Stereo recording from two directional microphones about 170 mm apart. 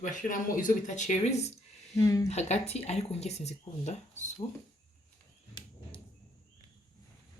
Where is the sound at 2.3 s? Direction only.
40° left (ahead or behind).